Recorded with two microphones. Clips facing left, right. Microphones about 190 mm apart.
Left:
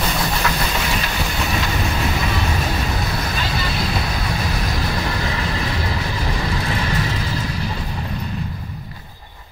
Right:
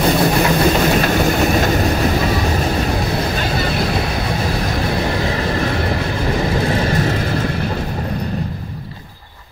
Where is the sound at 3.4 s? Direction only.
50° right (ahead or behind).